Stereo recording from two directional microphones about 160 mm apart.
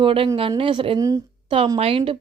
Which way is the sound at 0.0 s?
35° right (ahead or behind).